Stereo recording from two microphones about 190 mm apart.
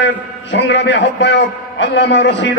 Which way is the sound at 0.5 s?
65° left (ahead or behind).